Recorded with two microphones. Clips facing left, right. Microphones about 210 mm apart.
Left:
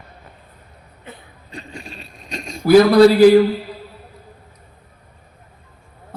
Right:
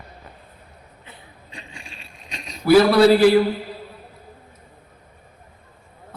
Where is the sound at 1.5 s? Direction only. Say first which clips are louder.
Left 8 dB; 40° left (ahead or behind).